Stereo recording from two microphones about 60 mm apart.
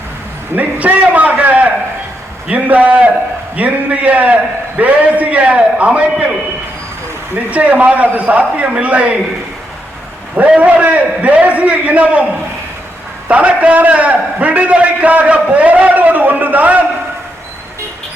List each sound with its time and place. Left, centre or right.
0.5 s a man's voice: right
7.3 s a man's voice: right
10.6 s a man's voice: right
13.2 s a man's voice: right